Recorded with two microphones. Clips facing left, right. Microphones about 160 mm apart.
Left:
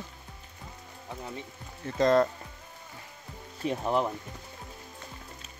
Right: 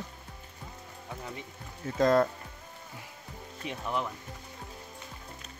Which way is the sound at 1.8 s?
Centre (ahead or behind).